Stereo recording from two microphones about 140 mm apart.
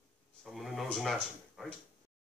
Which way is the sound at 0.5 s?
Centre (ahead or behind).